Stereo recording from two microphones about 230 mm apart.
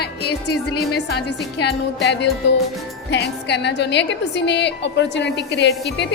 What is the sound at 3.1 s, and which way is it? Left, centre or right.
A woman's voice, left.